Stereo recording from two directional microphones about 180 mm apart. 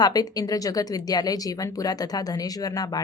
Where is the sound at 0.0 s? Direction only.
20° left (ahead or behind).